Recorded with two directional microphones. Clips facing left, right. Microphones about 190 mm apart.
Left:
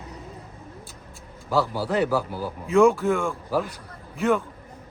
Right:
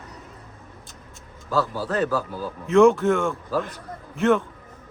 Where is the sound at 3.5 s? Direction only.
10° left (ahead or behind).